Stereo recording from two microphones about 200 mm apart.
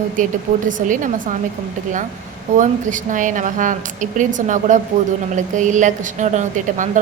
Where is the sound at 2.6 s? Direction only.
40° right (ahead or behind).